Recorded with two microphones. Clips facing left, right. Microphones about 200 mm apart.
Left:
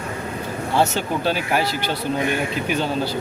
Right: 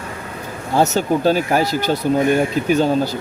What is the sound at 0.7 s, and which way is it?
Speech, 45° right (ahead or behind).